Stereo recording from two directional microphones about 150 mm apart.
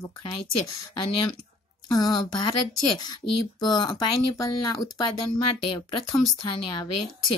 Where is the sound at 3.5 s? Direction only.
30° left (ahead or behind).